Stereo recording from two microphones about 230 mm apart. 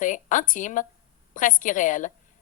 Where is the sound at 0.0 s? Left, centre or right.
Left.